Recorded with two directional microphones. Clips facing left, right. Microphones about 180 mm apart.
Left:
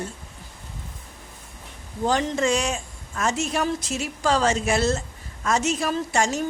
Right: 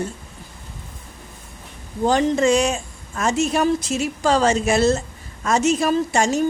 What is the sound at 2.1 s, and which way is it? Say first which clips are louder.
Speech: right 5 dB; 25° right (ahead or behind).